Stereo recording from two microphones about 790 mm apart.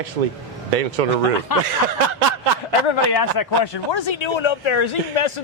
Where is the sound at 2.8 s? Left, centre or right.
Left.